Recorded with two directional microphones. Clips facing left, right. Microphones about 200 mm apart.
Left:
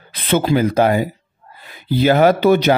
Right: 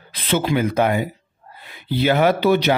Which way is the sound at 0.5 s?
35° left (ahead or behind).